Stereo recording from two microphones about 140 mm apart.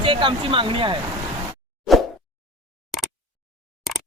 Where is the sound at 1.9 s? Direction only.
Centre (ahead or behind).